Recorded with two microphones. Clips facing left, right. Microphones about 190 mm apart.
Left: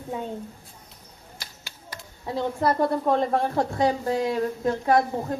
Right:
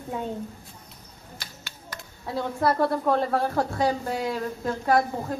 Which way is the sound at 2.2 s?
15° left (ahead or behind).